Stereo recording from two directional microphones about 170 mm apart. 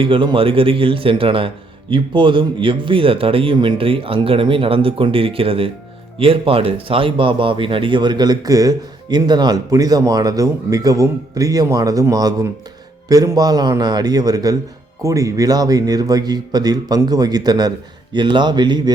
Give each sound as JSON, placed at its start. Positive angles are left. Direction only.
{"t": 0.0, "sound": "a man's voice", "side_deg": -30}